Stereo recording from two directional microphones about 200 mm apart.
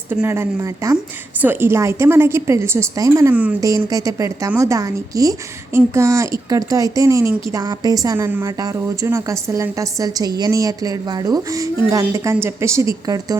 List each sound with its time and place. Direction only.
0.1 s a woman's voice: 15° right (ahead or behind)